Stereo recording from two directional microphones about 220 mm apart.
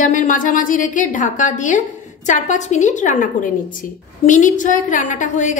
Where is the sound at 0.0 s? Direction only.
35° left (ahead or behind).